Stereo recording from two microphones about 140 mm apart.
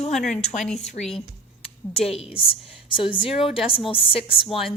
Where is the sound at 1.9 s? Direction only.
45° left (ahead or behind).